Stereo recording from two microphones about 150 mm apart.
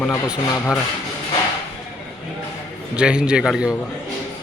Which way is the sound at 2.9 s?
5° right (ahead or behind).